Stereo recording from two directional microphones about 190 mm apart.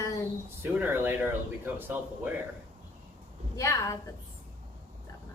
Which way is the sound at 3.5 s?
15° left (ahead or behind).